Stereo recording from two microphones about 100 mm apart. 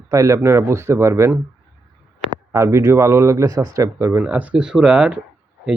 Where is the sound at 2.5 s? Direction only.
30° right (ahead or behind).